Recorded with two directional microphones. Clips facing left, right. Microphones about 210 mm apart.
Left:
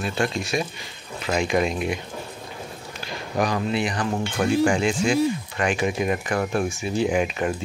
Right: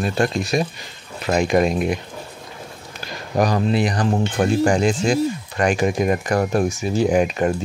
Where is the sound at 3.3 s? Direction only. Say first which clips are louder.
Right 5 dB; 40° right (ahead or behind).